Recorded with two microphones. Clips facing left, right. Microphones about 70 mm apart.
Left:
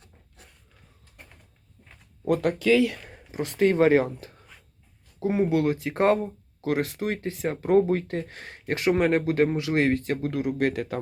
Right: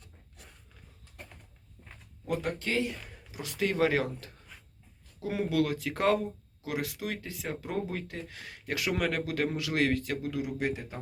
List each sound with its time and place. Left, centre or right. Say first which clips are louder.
2.2 s speech: left 10 dB; left
3.1 s speech: left 10 dB; left
6.6 s speech: left 8 dB; left